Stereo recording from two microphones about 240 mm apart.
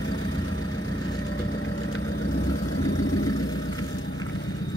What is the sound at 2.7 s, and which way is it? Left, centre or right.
Vehicle, left.